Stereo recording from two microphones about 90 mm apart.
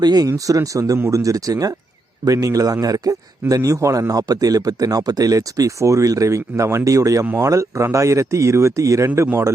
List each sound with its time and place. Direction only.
0.0 s speech: 50° right (ahead or behind)
0.3 s a man's voice: 40° right (ahead or behind)